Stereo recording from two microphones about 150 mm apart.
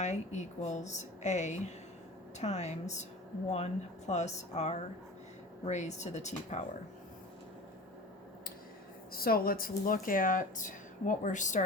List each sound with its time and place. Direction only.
0.0 s speech: 50° left (ahead or behind)
9.1 s speech: 80° left; by 11.6 s 55° left (ahead or behind)